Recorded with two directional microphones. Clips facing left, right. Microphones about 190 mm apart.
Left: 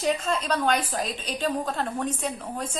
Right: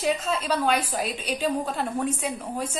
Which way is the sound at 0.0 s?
5° right (ahead or behind).